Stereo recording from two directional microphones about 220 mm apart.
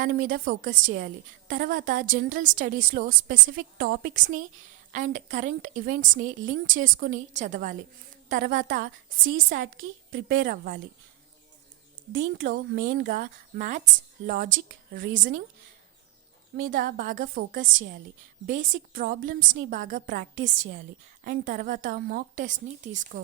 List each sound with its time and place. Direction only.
0.0 s a woman's voice: 40° right (ahead or behind)
12.4 s a woman's voice: 45° right (ahead or behind)
16.6 s a woman's voice: 40° right (ahead or behind)